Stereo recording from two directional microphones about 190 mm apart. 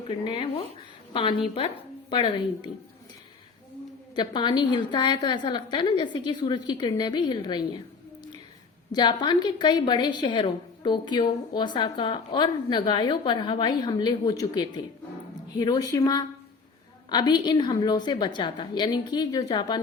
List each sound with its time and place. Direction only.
0.1 s a woman's voice: 30° left (ahead or behind)
4.1 s a woman's voice: 25° left (ahead or behind)
8.9 s a woman's voice: 25° left (ahead or behind)